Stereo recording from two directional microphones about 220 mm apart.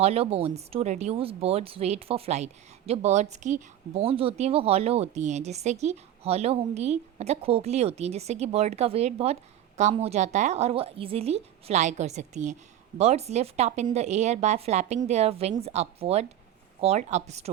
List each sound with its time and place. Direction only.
0.0 s a woman's voice: 30° right (ahead or behind)